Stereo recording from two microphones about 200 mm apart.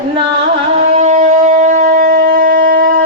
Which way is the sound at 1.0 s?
35° right (ahead or behind).